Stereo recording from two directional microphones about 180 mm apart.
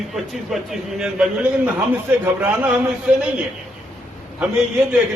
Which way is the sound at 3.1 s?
5° right (ahead or behind).